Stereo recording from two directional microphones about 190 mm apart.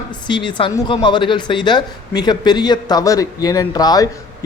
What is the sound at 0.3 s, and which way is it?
Speech, 25° left (ahead or behind).